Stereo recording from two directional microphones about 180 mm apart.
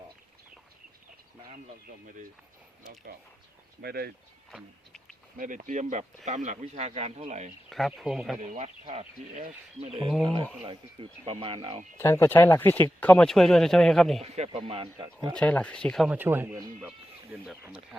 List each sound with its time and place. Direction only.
3.8 s speech: 60° right (ahead or behind)
4.5 s speech: centre (ahead or behind)
5.4 s speech: 45° right (ahead or behind)
7.7 s speech: centre (ahead or behind)
8.5 s speech: 35° right (ahead or behind)
10.1 s speech: centre (ahead or behind)
10.7 s speech: 30° right (ahead or behind)
11.9 s speech: 15° left (ahead or behind)
14.2 s speech: 35° right (ahead or behind)
15.4 s speech: 10° left (ahead or behind)
16.1 s speech: 10° right (ahead or behind)